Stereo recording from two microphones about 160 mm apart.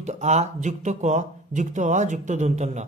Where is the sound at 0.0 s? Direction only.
45° right (ahead or behind).